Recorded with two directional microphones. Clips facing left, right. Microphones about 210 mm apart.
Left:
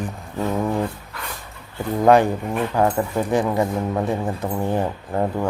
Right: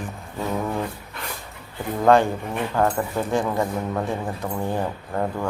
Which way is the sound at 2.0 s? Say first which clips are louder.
Left 2 dB; 15° left (ahead or behind).